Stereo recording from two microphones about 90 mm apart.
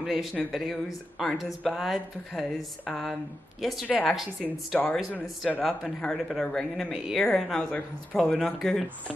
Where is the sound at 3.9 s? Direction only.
15° left (ahead or behind).